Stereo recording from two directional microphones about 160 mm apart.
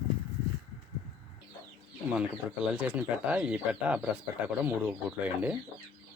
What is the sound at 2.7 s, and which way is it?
Speech, 10° right (ahead or behind).